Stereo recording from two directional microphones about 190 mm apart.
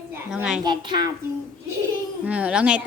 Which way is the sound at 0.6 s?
25° right (ahead or behind).